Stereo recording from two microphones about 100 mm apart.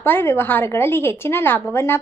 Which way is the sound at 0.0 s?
20° left (ahead or behind).